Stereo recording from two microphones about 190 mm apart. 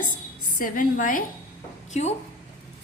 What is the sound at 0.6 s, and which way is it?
Speech, 45° left (ahead or behind).